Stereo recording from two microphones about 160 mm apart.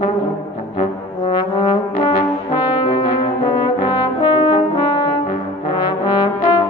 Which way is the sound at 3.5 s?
30° left (ahead or behind).